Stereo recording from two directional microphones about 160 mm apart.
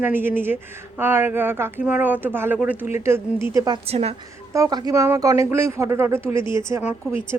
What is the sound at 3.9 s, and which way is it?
Speech, 40° right (ahead or behind).